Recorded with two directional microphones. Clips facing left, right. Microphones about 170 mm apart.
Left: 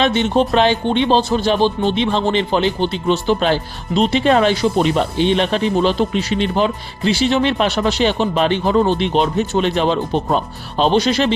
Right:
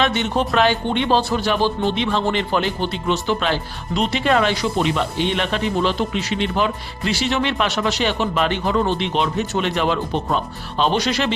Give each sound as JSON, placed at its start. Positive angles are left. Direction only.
{"t": 0.0, "sound": "speech", "side_deg": 30}